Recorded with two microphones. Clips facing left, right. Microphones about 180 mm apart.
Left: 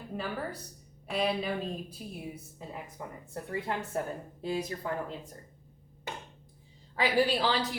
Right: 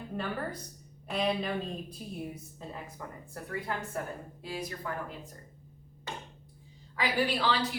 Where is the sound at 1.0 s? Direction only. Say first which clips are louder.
Even; 5° left (ahead or behind); by 4.0 s 25° left (ahead or behind).